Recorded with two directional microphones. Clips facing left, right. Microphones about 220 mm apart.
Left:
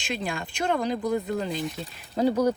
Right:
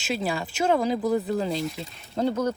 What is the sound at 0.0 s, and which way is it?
Speech, 5° right (ahead or behind).